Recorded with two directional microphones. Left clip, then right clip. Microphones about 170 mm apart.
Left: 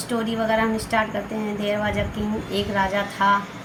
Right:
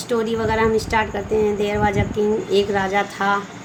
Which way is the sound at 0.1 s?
35° right (ahead or behind).